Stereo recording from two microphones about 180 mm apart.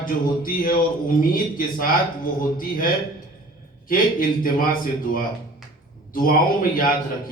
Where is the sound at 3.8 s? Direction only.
50° left (ahead or behind).